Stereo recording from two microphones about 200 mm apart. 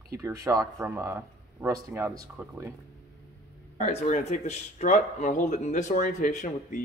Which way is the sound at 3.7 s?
35° left (ahead or behind).